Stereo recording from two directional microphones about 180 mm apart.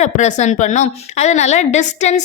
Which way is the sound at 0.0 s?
40° left (ahead or behind).